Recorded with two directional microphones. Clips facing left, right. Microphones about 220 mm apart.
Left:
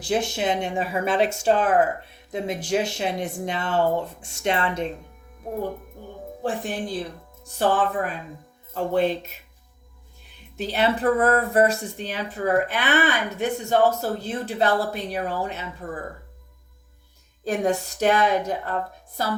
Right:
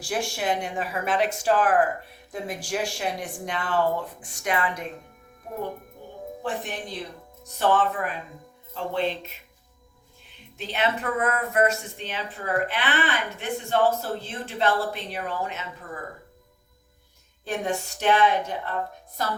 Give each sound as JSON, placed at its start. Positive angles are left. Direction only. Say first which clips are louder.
{"t": 0.0, "sound": "speech", "louder": "left 4 dB", "side_deg": 20}
{"t": 6.4, "sound": "speech", "louder": "left 5 dB", "side_deg": 30}
{"t": 8.7, "sound": "speech", "louder": "left 5 dB", "side_deg": 45}
{"t": 10.6, "sound": "speech", "louder": "left 5 dB", "side_deg": 35}
{"t": 17.4, "sound": "speech", "louder": "left 5 dB", "side_deg": 40}